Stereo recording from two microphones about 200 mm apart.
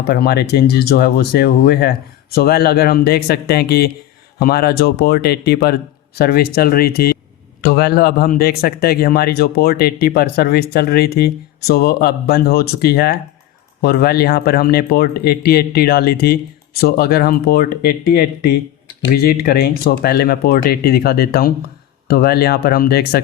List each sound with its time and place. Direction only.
0.1 s speech: 50° left (ahead or behind)